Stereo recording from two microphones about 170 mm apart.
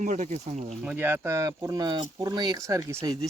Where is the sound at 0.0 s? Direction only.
45° right (ahead or behind).